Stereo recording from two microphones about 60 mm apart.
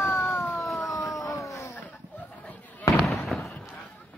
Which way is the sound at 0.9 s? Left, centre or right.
Left.